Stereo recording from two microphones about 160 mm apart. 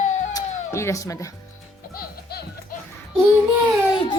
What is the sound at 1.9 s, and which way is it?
Music, 70° left (ahead or behind).